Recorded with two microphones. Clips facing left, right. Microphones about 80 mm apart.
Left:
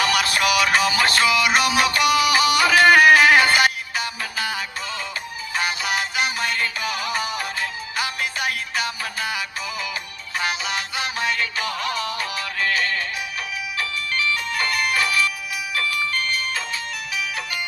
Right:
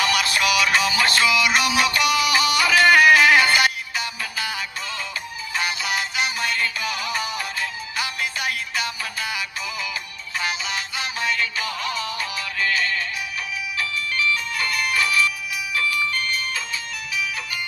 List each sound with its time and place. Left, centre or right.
0.0 s music: left
17.2 s music: left